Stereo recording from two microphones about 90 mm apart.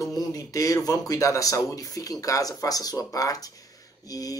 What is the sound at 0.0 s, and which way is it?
Speech, 40° left (ahead or behind).